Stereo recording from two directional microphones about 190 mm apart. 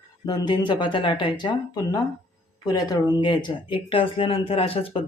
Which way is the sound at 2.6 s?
20° left (ahead or behind).